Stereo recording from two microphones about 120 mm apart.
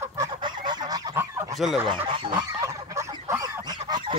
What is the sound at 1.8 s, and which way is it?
Speech, 45° right (ahead or behind).